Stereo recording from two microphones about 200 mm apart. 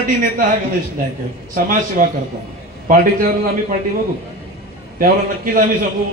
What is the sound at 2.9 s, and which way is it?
Speech, 45° right (ahead or behind).